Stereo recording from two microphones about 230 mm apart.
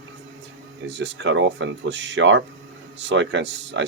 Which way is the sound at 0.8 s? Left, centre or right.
Right.